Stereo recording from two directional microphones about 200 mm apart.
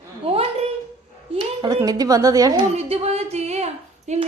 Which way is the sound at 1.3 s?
20° right (ahead or behind).